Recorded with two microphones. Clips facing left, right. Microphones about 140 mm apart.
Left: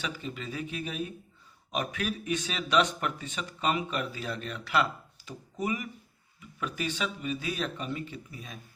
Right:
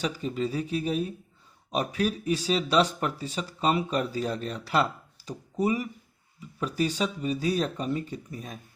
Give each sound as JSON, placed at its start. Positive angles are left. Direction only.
{"t": 0.0, "sound": "speech", "side_deg": -40}